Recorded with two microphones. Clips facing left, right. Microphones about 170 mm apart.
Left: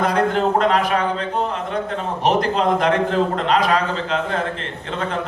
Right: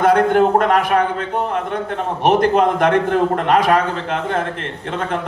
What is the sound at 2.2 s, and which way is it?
A man's voice, 55° right (ahead or behind).